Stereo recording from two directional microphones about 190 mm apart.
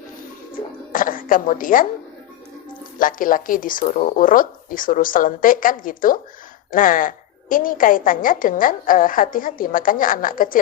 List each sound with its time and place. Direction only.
0.9 s speech: 45° left (ahead or behind)
3.0 s a woman's voice: 45° left (ahead or behind)